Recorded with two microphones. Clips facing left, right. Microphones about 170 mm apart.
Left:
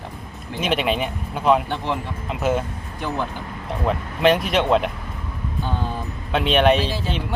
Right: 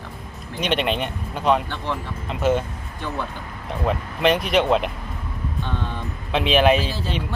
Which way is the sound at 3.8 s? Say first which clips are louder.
Left 2 dB; centre (ahead or behind).